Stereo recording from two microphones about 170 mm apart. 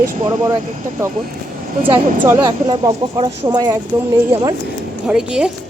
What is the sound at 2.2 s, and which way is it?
A woman's voice, 20° right (ahead or behind).